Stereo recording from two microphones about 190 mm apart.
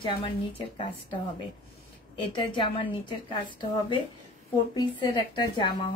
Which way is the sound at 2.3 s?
25° left (ahead or behind).